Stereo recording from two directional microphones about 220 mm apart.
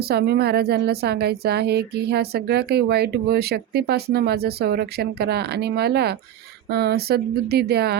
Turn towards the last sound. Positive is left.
turn(degrees=-45)  # may be behind; listen again after turning